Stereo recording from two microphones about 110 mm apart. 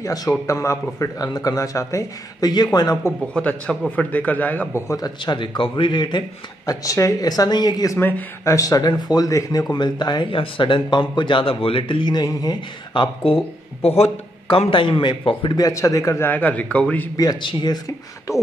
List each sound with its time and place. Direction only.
0.0 s a man's voice: 35° left (ahead or behind)
3.3 s a man's voice: 10° left (ahead or behind)
4.8 s a man's voice: 35° left (ahead or behind)
8.0 s speech: 20° left (ahead or behind)
8.5 s a man's voice: 30° left (ahead or behind); by 13.4 s 50° left (ahead or behind)
13.8 s a man's voice: 65° left (ahead or behind); by 15.6 s 45° left (ahead or behind)
15.6 s speech: 30° left (ahead or behind)
16.3 s a man's voice: 15° left (ahead or behind)
17.2 s a man's voice: 35° left (ahead or behind)